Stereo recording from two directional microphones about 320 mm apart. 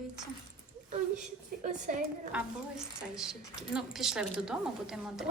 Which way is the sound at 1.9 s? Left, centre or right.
Right.